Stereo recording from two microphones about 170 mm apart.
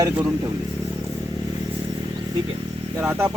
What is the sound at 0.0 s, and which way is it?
Speech, 20° right (ahead or behind).